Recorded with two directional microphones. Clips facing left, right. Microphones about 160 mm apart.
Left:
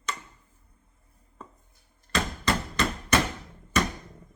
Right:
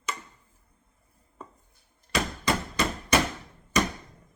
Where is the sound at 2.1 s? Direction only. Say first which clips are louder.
Even; 10° right (ahead or behind).